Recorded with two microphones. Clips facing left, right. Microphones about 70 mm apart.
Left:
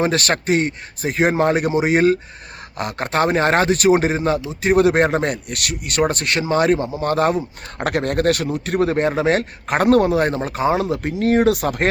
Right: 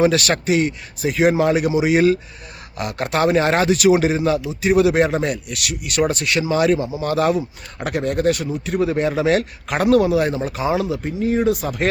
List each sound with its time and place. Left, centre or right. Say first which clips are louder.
0.0 s speech: right 2 dB; left
7.9 s speech: left 1 dB; left
11.2 s speech: left 3 dB; left